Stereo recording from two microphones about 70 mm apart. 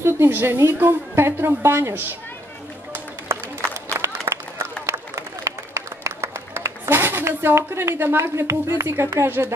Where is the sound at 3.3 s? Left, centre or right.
Right.